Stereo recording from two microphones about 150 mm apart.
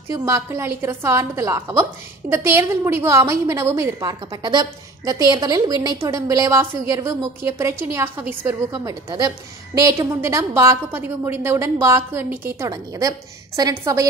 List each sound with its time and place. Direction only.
0.1 s a woman's voice: 20° right (ahead or behind)